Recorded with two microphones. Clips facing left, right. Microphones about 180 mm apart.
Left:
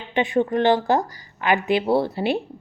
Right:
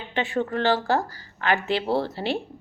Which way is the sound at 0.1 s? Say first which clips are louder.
Left 5 dB; 20° left (ahead or behind).